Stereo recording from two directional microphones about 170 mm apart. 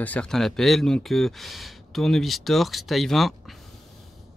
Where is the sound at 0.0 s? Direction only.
10° left (ahead or behind).